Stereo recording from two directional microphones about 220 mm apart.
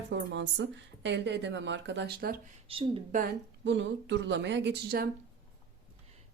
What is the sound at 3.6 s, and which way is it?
A woman's voice, 55° right (ahead or behind).